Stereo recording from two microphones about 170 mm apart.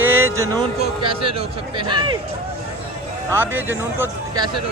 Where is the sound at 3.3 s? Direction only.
10° right (ahead or behind).